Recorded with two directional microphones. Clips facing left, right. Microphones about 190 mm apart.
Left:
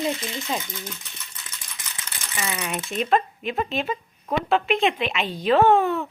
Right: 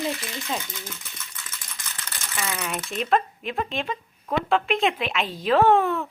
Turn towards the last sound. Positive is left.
turn(degrees=0)  # may be behind; listen again after turning